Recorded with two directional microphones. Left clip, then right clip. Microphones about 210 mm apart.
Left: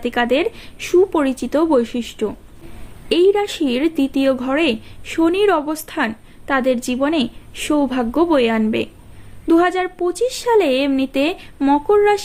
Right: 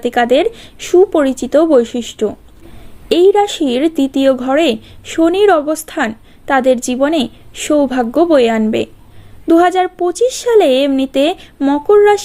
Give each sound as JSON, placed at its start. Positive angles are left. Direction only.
{"t": 0.0, "sound": "a woman's voice", "side_deg": -20}